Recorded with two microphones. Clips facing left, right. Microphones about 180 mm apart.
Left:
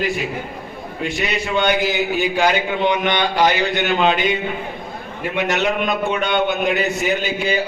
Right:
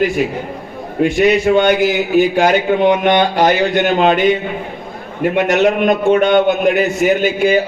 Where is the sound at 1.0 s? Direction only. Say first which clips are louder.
Right 12 dB; 50° right (ahead or behind).